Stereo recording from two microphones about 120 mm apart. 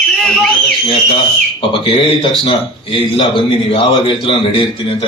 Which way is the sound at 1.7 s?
50° left (ahead or behind).